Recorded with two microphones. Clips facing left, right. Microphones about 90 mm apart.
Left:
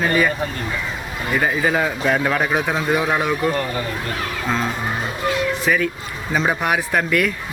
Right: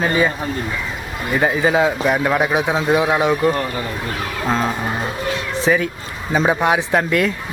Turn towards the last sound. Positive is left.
turn(degrees=-25)  # may be behind; listen again after turning